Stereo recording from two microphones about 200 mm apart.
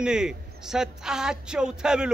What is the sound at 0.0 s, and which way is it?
A woman's voice, 5° right (ahead or behind).